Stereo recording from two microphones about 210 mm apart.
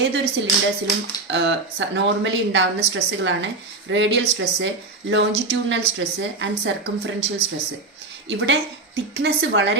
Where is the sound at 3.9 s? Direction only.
60° right (ahead or behind).